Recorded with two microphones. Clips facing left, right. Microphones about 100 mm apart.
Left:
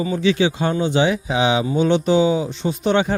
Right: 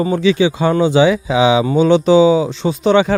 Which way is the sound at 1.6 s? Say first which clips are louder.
Right 6 dB; 90° right.